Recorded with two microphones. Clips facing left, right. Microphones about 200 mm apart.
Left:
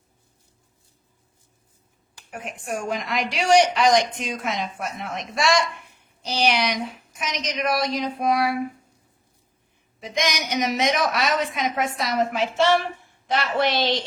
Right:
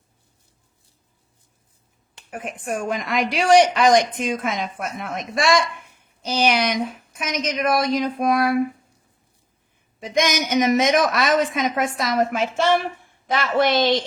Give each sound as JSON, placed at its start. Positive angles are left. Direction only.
{"t": 2.3, "sound": "a woman's voice", "side_deg": -50}
{"t": 10.2, "sound": "a woman's voice", "side_deg": -50}